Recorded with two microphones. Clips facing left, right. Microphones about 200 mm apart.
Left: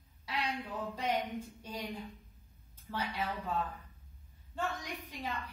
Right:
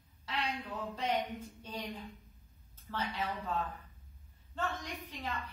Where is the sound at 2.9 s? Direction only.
Centre (ahead or behind).